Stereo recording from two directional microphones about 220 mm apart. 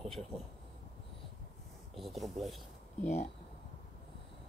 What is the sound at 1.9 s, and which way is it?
Speech, centre (ahead or behind).